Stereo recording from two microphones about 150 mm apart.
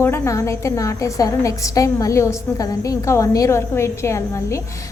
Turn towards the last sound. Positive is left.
turn(degrees=20)  # may be behind; listen again after turning